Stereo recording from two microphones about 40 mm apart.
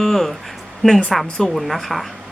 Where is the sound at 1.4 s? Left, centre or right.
Centre.